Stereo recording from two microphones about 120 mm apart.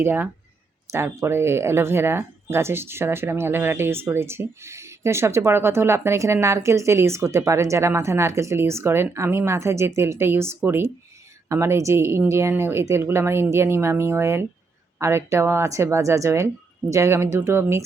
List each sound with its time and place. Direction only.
0.0 s speech: 20° right (ahead or behind)